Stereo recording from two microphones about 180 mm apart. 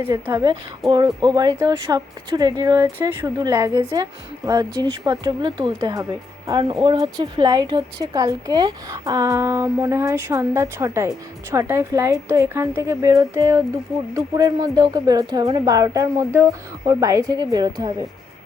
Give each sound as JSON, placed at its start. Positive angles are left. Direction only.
{"t": 0.0, "sound": "a woman's voice", "side_deg": -15}